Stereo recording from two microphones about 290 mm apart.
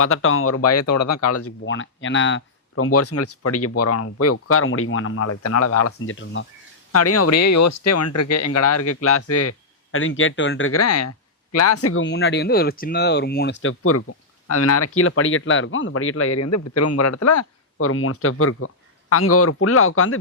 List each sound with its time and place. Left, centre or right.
0.0 s speech: left
6.9 s speech: left